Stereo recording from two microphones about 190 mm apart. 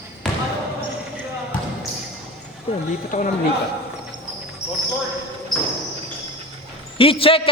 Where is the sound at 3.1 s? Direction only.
45° left (ahead or behind).